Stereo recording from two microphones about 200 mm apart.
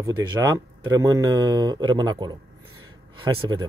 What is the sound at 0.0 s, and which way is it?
Speech, 20° right (ahead or behind).